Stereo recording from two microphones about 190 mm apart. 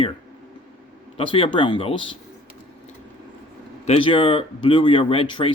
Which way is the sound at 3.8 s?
30° left (ahead or behind).